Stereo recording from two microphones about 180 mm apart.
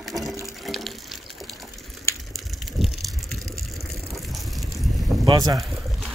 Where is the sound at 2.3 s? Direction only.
Centre (ahead or behind).